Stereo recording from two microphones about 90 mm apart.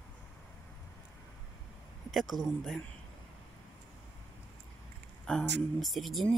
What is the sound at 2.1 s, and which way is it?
Speech, centre (ahead or behind).